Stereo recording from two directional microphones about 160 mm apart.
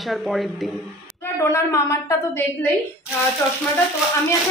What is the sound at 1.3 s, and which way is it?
A woman's voice, 20° left (ahead or behind).